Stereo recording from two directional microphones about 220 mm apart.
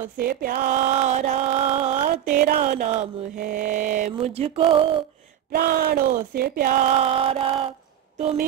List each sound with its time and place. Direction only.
0.2 s mantra: 40° right (ahead or behind); by 5.0 s 25° right (ahead or behind)
5.5 s mantra: 45° right (ahead or behind); by 7.7 s 25° right (ahead or behind)
8.2 s music: 30° right (ahead or behind)